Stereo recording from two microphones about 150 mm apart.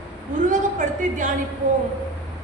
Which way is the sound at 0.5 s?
60° right (ahead or behind).